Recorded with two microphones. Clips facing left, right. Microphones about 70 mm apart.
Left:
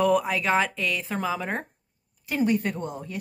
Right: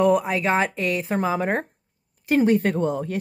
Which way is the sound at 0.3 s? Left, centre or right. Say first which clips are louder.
Right 2 dB; right.